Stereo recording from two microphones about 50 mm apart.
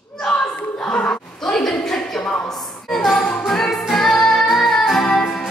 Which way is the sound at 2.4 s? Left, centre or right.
Centre.